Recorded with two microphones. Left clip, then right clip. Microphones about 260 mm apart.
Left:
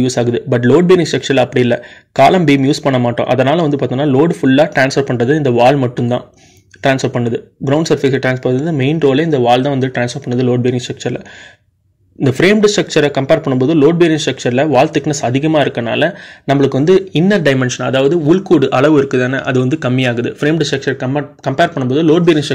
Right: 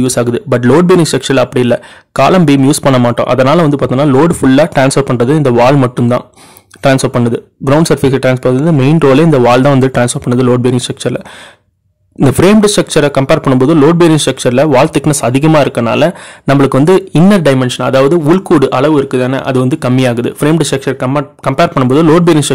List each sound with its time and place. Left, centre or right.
0.0 s a man's voice: centre
12.3 s a man's voice: right